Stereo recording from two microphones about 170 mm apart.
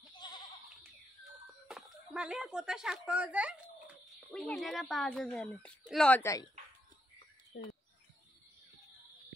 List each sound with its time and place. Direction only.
1.7 s a sound: 5° right (ahead or behind)
4.3 s speech: 5° left (ahead or behind)
7.5 s speech: 90° left